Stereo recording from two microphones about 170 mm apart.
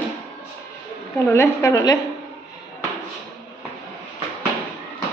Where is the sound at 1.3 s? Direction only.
15° left (ahead or behind).